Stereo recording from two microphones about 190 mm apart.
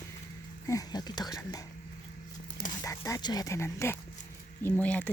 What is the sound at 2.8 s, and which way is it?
Speech, 15° left (ahead or behind).